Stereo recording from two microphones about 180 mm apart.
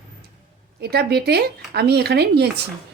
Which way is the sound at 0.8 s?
65° right (ahead or behind).